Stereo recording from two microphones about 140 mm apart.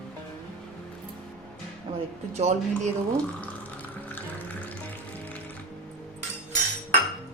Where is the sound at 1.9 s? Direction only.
35° right (ahead or behind).